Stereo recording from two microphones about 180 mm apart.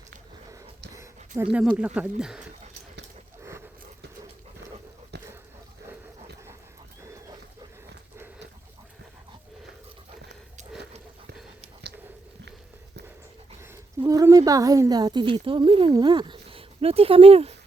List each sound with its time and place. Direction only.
1.4 s speech: 5° right (ahead or behind)
5.1 s a sound: 70° right (ahead or behind)
7.0 s dog: 15° right (ahead or behind)
13.6 s a woman's voice: 15° right (ahead or behind); by 17.5 s 35° right (ahead or behind)